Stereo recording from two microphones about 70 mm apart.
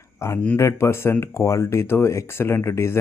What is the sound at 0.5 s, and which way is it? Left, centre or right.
Speech, left.